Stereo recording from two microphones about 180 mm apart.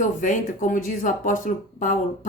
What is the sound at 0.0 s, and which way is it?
Speech, 45° left (ahead or behind).